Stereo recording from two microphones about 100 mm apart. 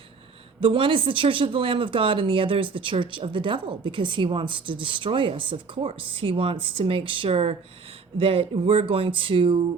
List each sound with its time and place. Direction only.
0.6 s speech: 60° right (ahead or behind); by 7.5 s 80° right
8.2 s speech: 65° right (ahead or behind)